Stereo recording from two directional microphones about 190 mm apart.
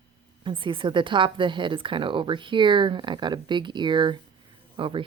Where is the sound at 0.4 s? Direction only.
25° right (ahead or behind).